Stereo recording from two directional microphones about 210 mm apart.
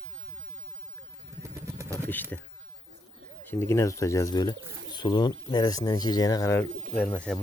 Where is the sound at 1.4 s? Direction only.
15° right (ahead or behind).